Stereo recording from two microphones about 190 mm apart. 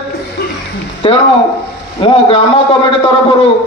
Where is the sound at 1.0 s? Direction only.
25° left (ahead or behind).